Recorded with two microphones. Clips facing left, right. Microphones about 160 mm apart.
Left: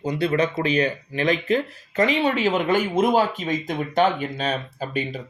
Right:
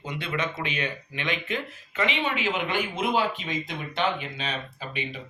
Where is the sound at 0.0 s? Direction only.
40° left (ahead or behind).